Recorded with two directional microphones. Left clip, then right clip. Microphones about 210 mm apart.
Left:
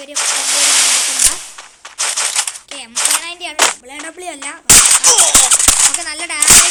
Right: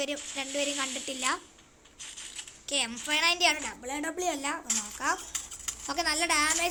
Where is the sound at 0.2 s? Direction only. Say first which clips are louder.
Left 17 dB; 60° left (ahead or behind).